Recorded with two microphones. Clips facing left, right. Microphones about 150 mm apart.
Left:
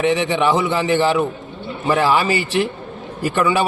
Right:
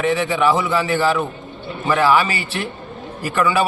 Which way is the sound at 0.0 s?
25° left (ahead or behind).